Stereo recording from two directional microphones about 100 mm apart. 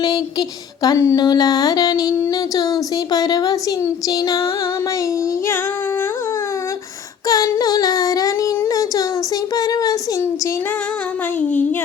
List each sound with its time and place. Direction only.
0.0 s child singing: 40° left (ahead or behind)
1.2 s speech: 40° left (ahead or behind)
7.3 s child singing: 35° left (ahead or behind)
9.6 s speech: 40° left (ahead or behind)
11.3 s a sound: 15° left (ahead or behind)